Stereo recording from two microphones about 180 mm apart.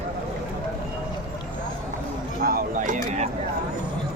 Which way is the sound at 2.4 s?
55° right (ahead or behind).